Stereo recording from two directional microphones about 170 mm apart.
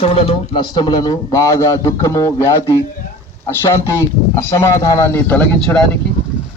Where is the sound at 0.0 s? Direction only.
35° left (ahead or behind); by 5.8 s 5° left (ahead or behind).